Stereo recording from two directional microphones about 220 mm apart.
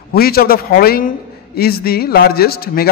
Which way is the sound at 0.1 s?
45° left (ahead or behind).